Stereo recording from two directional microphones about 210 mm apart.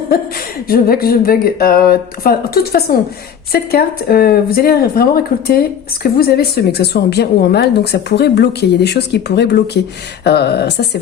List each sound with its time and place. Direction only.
0.1 s speech: 45° left (ahead or behind)